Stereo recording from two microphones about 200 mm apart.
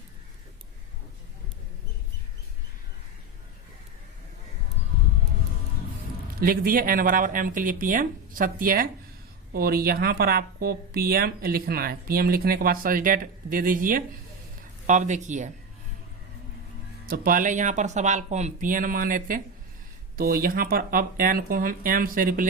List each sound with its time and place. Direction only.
6.4 s speech: 45° right (ahead or behind)
17.1 s speech: 45° right (ahead or behind)